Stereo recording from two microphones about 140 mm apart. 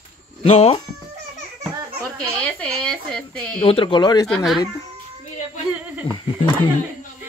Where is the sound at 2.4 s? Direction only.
5° left (ahead or behind).